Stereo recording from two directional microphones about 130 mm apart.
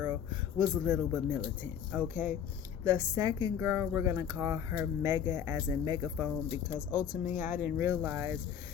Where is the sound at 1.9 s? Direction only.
15° right (ahead or behind).